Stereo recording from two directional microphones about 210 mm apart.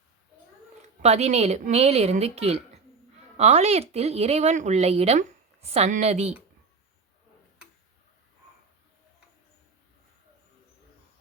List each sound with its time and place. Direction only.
0.8 s speech: 30° right (ahead or behind)